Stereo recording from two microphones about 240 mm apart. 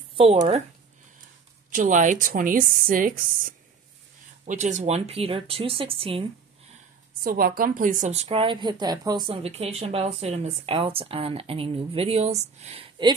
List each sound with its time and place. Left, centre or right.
0.2 s a woman's voice: right
1.7 s a woman's voice: right
4.5 s a woman's voice: right
7.2 s a woman's voice: right